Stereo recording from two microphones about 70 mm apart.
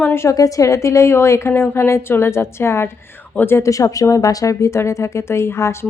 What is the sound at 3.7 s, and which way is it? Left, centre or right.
A woman's voice, left.